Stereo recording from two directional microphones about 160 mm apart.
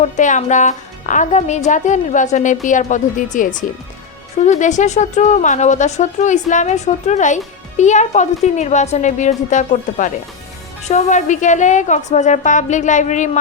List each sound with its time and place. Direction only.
0.0 s a woman's voice: 50° left (ahead or behind)